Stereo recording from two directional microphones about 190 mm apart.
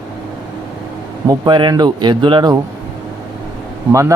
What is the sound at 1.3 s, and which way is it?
Speech, 25° right (ahead or behind).